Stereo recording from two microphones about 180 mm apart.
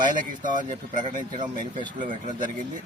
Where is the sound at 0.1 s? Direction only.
45° right (ahead or behind).